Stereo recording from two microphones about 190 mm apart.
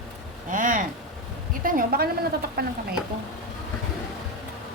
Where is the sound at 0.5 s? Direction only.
45° right (ahead or behind).